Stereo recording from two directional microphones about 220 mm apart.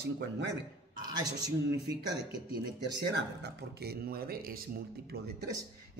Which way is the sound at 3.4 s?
45° right (ahead or behind).